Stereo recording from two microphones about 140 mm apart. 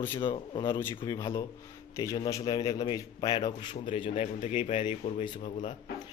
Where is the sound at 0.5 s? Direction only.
35° left (ahead or behind).